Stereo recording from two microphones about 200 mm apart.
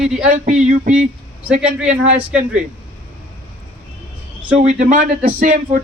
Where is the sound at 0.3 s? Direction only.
40° right (ahead or behind).